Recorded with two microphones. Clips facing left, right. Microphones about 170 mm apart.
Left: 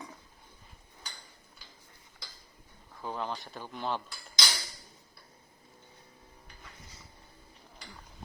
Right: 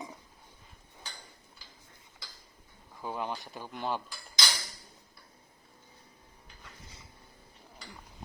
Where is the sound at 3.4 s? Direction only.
10° right (ahead or behind).